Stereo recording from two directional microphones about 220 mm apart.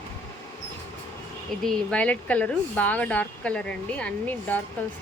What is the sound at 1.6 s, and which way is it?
Speech, 5° left (ahead or behind).